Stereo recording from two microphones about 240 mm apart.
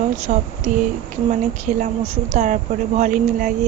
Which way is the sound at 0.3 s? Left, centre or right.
Right.